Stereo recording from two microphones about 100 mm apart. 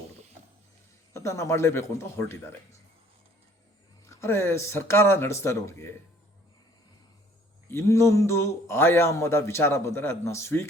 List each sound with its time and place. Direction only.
1.1 s a man's voice: 30° left (ahead or behind)
4.1 s a man's voice: 25° left (ahead or behind)
7.7 s a man's voice: 30° left (ahead or behind)